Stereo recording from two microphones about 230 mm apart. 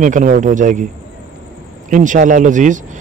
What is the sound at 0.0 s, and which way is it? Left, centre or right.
Speech, right.